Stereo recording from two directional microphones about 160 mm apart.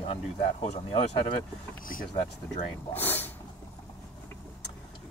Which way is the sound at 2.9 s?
10° left (ahead or behind).